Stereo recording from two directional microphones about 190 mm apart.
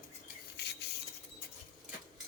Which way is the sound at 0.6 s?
60° left (ahead or behind).